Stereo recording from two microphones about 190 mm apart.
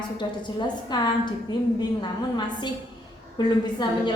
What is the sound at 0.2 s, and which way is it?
A woman's voice, 20° left (ahead or behind).